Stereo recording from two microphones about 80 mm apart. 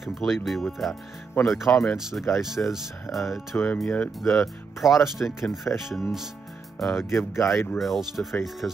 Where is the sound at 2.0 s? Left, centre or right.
Centre.